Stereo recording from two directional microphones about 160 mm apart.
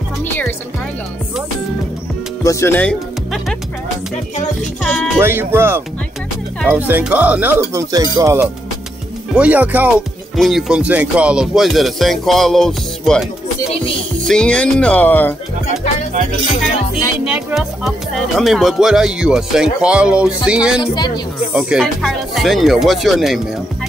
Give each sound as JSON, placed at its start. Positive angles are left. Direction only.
{"t": 2.4, "sound": "speech", "side_deg": 15}
{"t": 4.8, "sound": "speech", "side_deg": 5}
{"t": 5.2, "sound": "music", "side_deg": -15}
{"t": 6.8, "sound": "music", "side_deg": -10}
{"t": 9.3, "sound": "speech", "side_deg": -10}
{"t": 17.2, "sound": "speech", "side_deg": -5}
{"t": 20.8, "sound": "a woman's voice", "side_deg": 25}
{"t": 21.5, "sound": "speech", "side_deg": -5}